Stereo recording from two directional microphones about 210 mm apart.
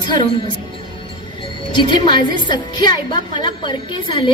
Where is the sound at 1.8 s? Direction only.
20° left (ahead or behind).